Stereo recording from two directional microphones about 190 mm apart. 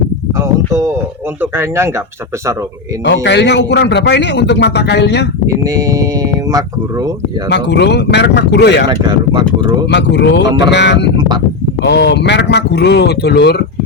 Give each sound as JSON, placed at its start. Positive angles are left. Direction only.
{"t": 0.3, "sound": "a sound", "side_deg": -15}
{"t": 1.4, "sound": "speech", "side_deg": -15}
{"t": 3.0, "sound": "a man's voice", "side_deg": 65}
{"t": 5.5, "sound": "speech", "side_deg": -15}
{"t": 7.5, "sound": "a man's voice", "side_deg": 65}
{"t": 8.9, "sound": "speech", "side_deg": -25}
{"t": 9.9, "sound": "a man's voice", "side_deg": 65}